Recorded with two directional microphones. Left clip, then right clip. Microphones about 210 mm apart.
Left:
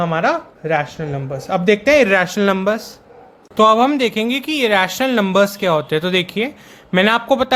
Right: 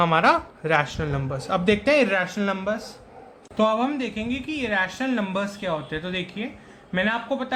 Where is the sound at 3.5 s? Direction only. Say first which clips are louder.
Left 10 dB; 45° left (ahead or behind).